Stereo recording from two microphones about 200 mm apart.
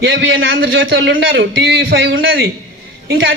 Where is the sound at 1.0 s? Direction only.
50° right (ahead or behind).